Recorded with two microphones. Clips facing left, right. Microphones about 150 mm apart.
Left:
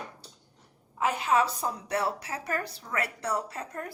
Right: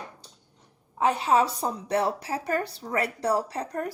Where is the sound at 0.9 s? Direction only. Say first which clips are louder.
Right 3 dB; 30° right (ahead or behind).